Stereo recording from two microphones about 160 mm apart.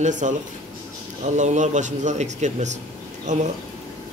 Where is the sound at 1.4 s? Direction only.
50° right (ahead or behind).